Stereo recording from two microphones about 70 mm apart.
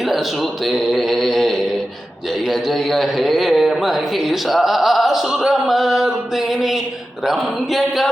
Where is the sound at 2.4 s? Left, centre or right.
Centre.